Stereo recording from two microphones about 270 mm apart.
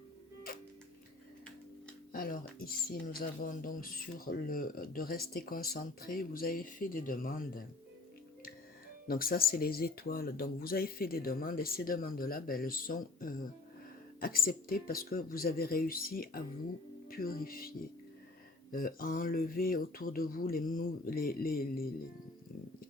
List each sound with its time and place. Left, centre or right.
2.1 s speech: left
9.0 s speech: left